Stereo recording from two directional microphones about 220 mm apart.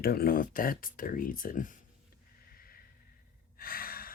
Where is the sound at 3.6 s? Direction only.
40° left (ahead or behind).